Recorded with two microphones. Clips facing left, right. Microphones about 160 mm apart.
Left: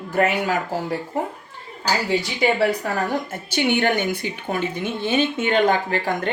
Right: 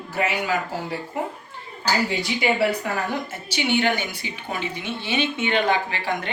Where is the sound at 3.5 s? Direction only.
55° left (ahead or behind).